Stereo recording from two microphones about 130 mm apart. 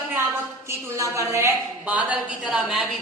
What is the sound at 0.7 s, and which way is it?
Speech, 25° right (ahead or behind).